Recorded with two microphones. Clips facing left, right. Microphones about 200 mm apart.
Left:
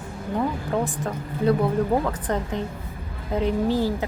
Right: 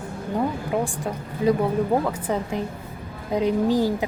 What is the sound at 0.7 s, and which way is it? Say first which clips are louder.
Speech: even; 10° right (ahead or behind).